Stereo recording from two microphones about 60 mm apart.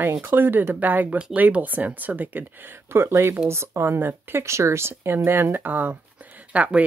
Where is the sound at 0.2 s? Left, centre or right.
Right.